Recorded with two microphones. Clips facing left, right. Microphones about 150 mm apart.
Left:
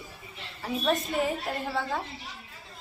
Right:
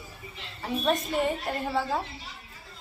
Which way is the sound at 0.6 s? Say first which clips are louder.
Right 1 dB; centre (ahead or behind).